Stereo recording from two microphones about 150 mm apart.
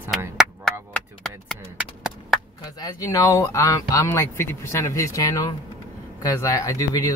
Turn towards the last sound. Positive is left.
turn(degrees=20)  # may be behind; listen again after turning